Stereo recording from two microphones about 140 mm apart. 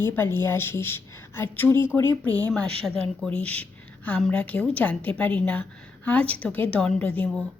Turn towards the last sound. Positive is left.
turn(degrees=15)  # may be behind; listen again after turning